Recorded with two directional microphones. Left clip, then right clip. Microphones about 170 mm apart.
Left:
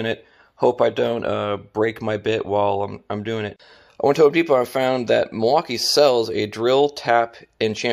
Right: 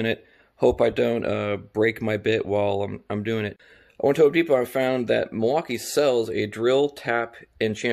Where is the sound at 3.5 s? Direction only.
15° right (ahead or behind).